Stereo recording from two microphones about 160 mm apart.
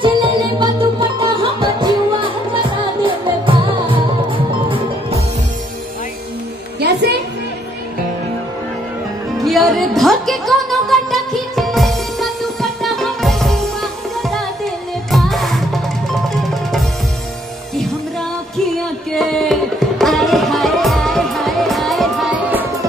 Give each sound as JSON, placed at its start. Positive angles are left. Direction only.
{"t": 0.0, "sound": "music", "side_deg": -30}
{"t": 6.8, "sound": "music", "side_deg": -90}
{"t": 9.4, "sound": "music", "side_deg": 0}
{"t": 19.1, "sound": "tabla", "side_deg": 0}